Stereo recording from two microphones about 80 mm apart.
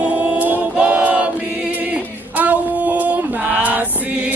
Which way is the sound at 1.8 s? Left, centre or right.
Right.